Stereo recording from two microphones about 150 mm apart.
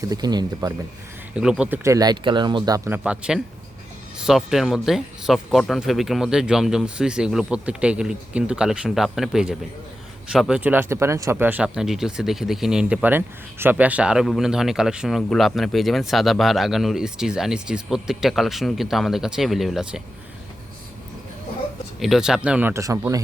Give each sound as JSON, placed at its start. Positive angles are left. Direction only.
{"t": 0.1, "sound": "speech", "side_deg": -25}
{"t": 1.4, "sound": "speech", "side_deg": -5}
{"t": 3.0, "sound": "speech", "side_deg": -5}
{"t": 22.0, "sound": "speech", "side_deg": -5}